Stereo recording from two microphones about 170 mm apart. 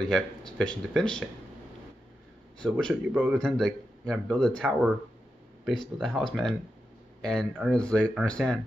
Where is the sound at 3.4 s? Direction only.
5° left (ahead or behind).